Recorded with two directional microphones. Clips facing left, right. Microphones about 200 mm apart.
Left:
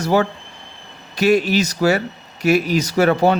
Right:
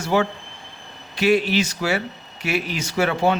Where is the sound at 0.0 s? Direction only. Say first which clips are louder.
Left 3 dB; 40° left (ahead or behind).